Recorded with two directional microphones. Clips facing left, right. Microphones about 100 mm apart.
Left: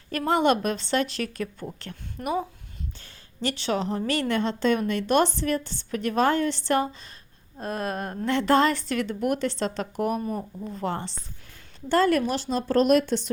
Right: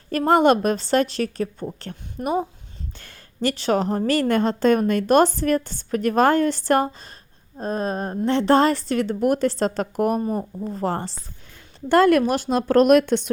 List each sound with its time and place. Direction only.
0.1 s a woman's voice: 45° right (ahead or behind); by 2.5 s 25° right (ahead or behind)
3.0 s a sound: 55° right (ahead or behind)
3.5 s a woman's voice: 45° right (ahead or behind)
7.6 s a woman's voice: 30° right (ahead or behind)
10.2 s a woman's voice: 30° right (ahead or behind)
11.9 s speech: 60° right (ahead or behind)